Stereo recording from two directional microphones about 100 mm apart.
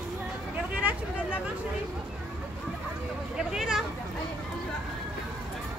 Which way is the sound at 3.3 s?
5° right (ahead or behind).